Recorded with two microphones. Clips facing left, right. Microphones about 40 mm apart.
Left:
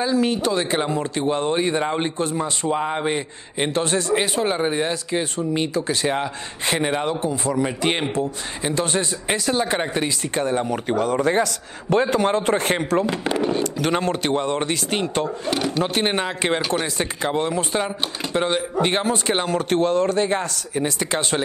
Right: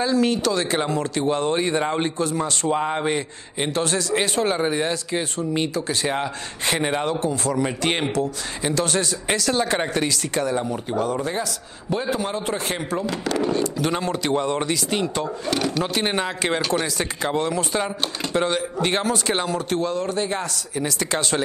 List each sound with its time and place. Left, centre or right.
0.0 s speech: centre
2.7 s a man's voice: centre
3.1 s speech: centre
3.7 s speech: left
4.1 s speech: centre
6.8 s a man's voice: centre
7.1 s speech: left
8.7 s a man's voice: left
13.1 s speech: left
13.6 s speech: left
15.5 s speech: centre
15.8 s speech: left
19.4 s a man's voice: left
21.0 s speech: left